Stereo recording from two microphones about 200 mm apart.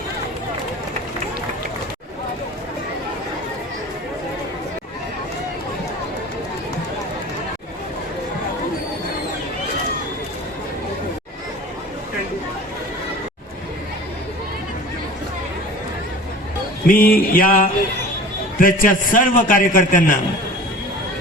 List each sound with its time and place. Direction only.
16.8 s a man's voice: 45° left (ahead or behind)